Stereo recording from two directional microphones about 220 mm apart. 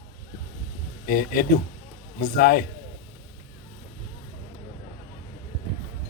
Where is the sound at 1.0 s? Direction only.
40° left (ahead or behind).